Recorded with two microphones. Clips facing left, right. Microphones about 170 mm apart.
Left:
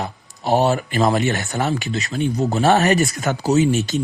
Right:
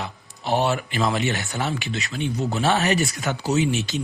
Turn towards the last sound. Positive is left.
turn(degrees=45)  # may be behind; listen again after turning